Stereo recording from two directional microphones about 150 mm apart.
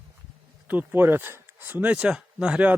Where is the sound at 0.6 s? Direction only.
10° right (ahead or behind).